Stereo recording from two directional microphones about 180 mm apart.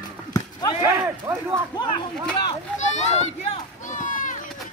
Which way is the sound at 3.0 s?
35° left (ahead or behind).